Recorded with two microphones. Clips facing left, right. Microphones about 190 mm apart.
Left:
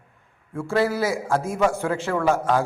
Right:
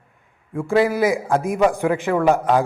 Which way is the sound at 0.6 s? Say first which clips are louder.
Right 4 dB; 15° right (ahead or behind).